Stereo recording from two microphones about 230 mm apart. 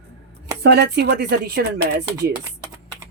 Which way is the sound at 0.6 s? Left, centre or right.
Right.